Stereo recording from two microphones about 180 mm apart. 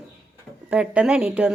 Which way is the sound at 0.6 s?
5° right (ahead or behind).